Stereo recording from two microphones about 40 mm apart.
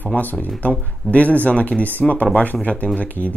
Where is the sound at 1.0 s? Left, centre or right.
Left.